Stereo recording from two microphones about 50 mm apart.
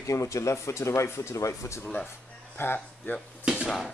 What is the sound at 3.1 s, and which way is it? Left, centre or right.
Speech, left.